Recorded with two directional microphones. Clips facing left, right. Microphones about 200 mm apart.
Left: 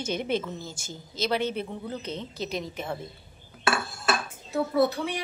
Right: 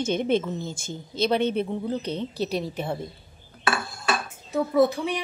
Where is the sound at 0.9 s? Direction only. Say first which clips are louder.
Right 4 dB; 55° right (ahead or behind).